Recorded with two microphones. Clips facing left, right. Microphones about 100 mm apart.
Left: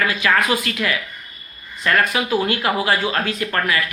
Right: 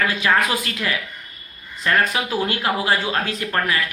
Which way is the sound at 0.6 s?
30° right (ahead or behind).